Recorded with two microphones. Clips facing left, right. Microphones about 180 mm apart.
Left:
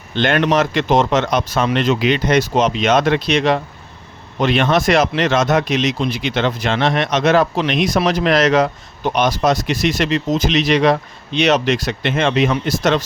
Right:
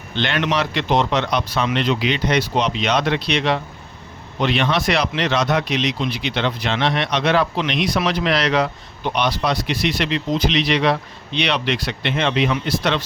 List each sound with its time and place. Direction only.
0.2 s speech: 50° left (ahead or behind)